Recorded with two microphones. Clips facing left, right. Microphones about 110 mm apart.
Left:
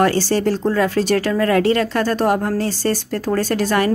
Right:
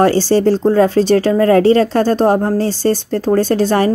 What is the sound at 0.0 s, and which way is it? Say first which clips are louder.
Speech: right 5 dB; 30° right (ahead or behind).